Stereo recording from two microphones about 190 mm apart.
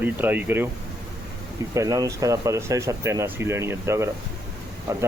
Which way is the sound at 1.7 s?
15° right (ahead or behind).